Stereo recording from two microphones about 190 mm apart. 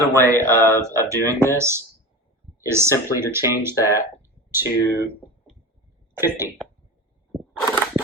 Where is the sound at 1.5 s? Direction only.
15° right (ahead or behind).